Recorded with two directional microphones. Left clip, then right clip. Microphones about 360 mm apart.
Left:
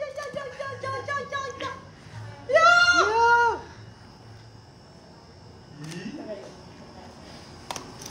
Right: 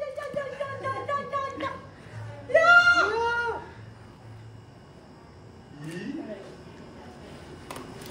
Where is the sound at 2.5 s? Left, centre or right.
Left.